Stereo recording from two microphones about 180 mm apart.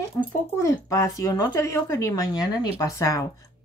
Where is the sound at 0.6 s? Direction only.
15° left (ahead or behind).